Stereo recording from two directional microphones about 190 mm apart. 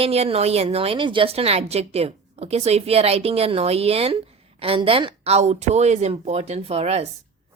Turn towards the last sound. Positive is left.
turn(degrees=-35)  # may be behind; listen again after turning